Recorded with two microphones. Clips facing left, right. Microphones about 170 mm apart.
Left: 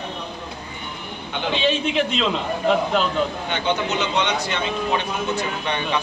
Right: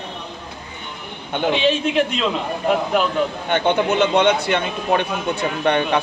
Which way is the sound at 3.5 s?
55° right (ahead or behind).